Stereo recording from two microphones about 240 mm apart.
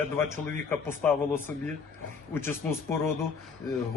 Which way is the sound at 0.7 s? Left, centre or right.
Centre.